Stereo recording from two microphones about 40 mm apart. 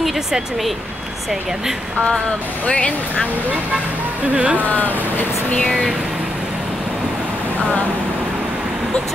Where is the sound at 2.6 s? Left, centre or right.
Left.